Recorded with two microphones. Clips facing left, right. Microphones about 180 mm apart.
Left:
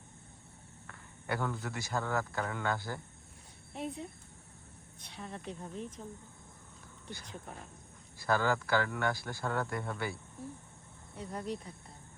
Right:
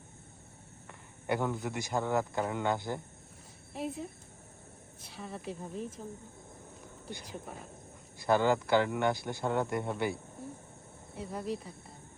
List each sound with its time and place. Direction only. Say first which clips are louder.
0.9 s a sound: right 4 dB; 15° right (ahead or behind)
1.6 s speech: right 3 dB; 15° right (ahead or behind)
3.7 s speech: right 2 dB; 5° right (ahead or behind)
8.2 s speech: right 4 dB; 20° right (ahead or behind)
10.4 s cricket: right 1 dB; centre (ahead or behind)
11.1 s speech: right 2 dB; centre (ahead or behind)